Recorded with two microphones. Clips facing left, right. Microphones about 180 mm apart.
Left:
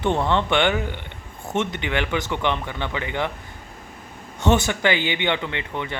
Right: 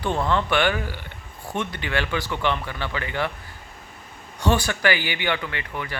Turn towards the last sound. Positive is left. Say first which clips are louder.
# left 3 dB
turn(degrees=20)  # may be behind; listen again after turning